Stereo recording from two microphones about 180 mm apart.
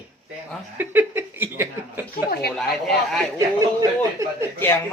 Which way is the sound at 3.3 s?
20° right (ahead or behind).